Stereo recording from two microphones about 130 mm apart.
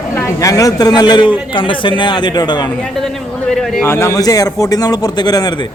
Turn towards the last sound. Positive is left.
turn(degrees=30)  # may be behind; listen again after turning